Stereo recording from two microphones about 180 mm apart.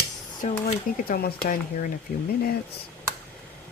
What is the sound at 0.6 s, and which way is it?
Speech, 55° left (ahead or behind).